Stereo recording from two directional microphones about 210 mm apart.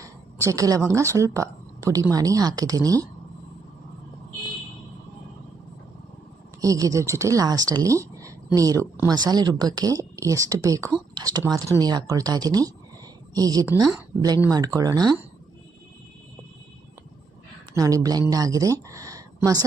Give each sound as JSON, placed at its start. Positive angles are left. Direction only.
{"t": 0.0, "sound": "a woman's voice", "side_deg": -15}
{"t": 6.6, "sound": "speech", "side_deg": -15}
{"t": 17.7, "sound": "speech", "side_deg": -15}